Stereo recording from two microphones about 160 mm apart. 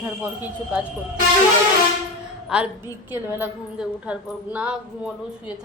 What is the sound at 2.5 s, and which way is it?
A woman's voice, 5° right (ahead or behind).